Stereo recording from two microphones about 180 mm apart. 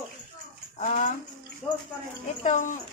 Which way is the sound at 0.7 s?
45° left (ahead or behind).